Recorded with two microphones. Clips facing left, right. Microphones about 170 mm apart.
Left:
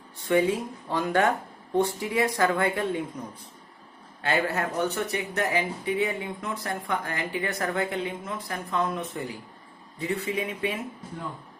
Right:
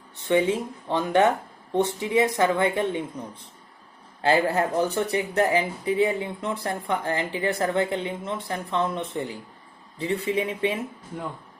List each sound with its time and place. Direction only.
0.3 s speech: 25° right (ahead or behind)
4.2 s speech: 30° right (ahead or behind)